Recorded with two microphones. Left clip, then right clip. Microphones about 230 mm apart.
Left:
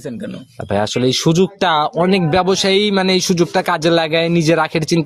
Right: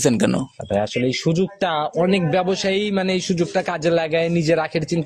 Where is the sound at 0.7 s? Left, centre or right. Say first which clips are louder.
Left 4 dB; left.